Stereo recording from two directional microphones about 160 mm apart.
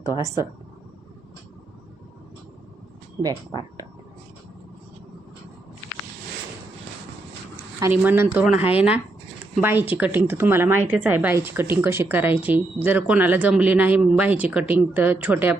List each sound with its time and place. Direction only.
0.1 s speech: 20° right (ahead or behind)
3.2 s speech: 25° right (ahead or behind)
7.8 s speech: 15° right (ahead or behind)